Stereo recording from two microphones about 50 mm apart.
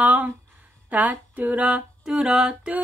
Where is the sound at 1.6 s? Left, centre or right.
Centre.